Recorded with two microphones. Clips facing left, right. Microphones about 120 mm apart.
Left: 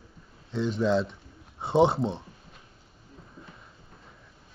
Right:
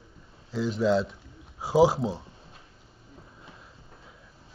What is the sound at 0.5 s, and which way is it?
Speech, centre (ahead or behind).